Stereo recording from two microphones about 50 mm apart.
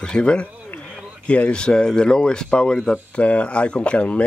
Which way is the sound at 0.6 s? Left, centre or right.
Left.